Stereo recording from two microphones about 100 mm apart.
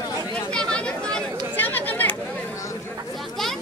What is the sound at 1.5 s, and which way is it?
Chatter, 20° left (ahead or behind).